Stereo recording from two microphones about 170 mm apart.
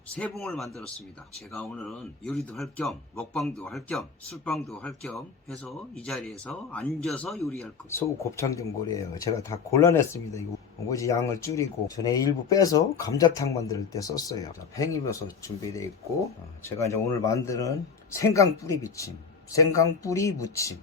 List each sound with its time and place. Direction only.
0.1 s speech: 5° left (ahead or behind)
7.9 s speech: 15° left (ahead or behind)